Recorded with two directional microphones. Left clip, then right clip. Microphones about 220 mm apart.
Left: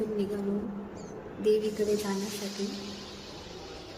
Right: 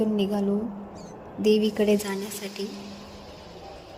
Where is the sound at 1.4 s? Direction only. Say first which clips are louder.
Right 4 dB; 35° right (ahead or behind).